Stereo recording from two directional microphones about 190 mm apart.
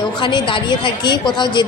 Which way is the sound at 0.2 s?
25° left (ahead or behind).